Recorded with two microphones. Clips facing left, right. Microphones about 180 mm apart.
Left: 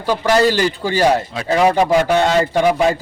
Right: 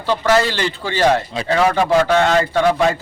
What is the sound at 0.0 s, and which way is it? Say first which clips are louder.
Speech: even; 15° left (ahead or behind).